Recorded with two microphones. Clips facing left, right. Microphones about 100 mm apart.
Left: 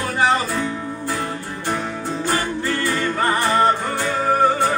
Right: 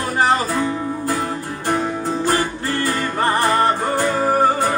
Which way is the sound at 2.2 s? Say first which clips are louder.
Right 1 dB; 45° right (ahead or behind).